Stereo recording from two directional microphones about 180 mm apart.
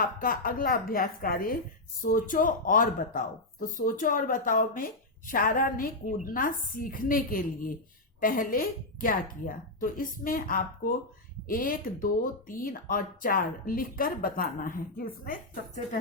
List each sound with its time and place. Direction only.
0.0 s speech: 50° left (ahead or behind)